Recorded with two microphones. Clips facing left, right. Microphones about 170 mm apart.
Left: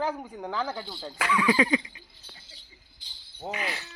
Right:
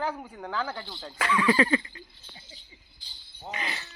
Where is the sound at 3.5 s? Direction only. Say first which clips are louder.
Left 2 dB; 5° left (ahead or behind).